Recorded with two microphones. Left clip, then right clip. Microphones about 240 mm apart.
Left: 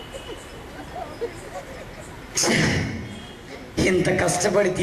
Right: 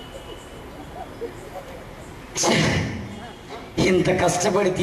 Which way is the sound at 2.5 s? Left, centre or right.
Centre.